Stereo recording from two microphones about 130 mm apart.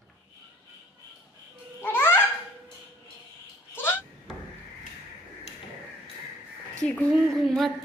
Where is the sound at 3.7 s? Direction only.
15° left (ahead or behind).